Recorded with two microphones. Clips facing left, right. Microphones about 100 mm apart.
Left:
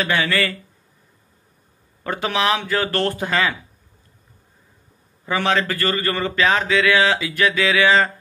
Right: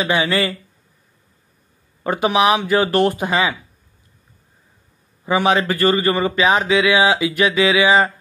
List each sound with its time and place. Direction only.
0.0 s speech: 20° right (ahead or behind)
2.0 s speech: 15° right (ahead or behind)
5.2 s speech: 15° right (ahead or behind)